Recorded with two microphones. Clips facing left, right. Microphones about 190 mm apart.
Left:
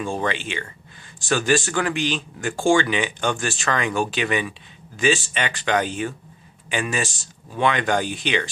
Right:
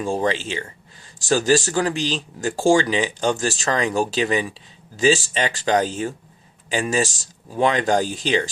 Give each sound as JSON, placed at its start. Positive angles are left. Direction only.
{"t": 0.0, "sound": "speech", "side_deg": -35}